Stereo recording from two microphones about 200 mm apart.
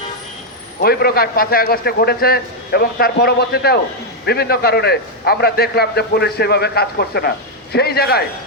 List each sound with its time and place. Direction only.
0.8 s a man's voice: 50° left (ahead or behind)